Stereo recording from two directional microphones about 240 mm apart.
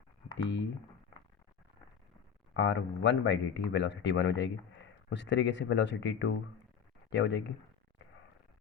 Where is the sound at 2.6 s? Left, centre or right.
Left.